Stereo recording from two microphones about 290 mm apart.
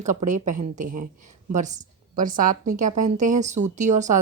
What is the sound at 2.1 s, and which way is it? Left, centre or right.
A woman's voice, right.